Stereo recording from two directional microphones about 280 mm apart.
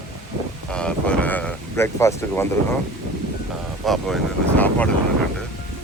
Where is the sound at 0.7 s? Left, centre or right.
Centre.